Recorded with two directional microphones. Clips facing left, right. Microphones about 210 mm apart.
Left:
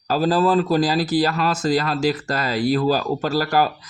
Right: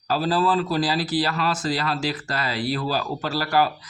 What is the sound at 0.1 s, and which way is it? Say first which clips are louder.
A man's voice: left 4 dB; 45° left (ahead or behind).